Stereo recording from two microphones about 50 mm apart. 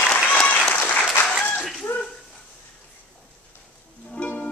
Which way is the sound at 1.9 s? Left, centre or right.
Left.